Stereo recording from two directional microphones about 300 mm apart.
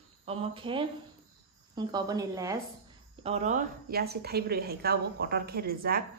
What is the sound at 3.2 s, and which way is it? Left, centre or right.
A woman's voice, right.